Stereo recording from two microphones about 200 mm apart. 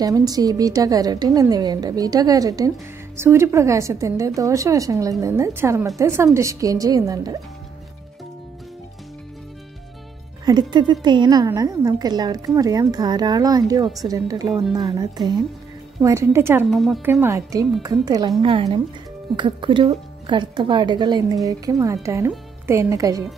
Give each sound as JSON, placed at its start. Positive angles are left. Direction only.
{"t": 0.0, "sound": "a woman's voice", "side_deg": -20}
{"t": 10.4, "sound": "a woman's voice", "side_deg": -20}
{"t": 14.5, "sound": "speech", "side_deg": 0}
{"t": 14.8, "sound": "a woman's voice", "side_deg": -20}
{"t": 16.7, "sound": "speech", "side_deg": 0}
{"t": 17.0, "sound": "a woman's voice", "side_deg": -15}